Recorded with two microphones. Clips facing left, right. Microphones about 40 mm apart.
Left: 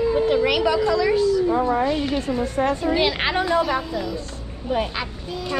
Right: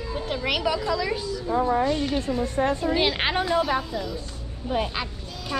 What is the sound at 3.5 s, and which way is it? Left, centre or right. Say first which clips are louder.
A woman's voice: left 3 dB; centre.